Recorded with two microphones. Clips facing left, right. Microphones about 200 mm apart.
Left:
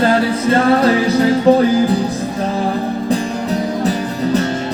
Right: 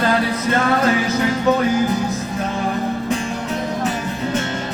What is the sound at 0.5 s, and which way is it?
Music, 35° left (ahead or behind).